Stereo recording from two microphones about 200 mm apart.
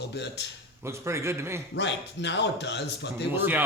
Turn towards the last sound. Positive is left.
turn(degrees=-10)  # may be behind; listen again after turning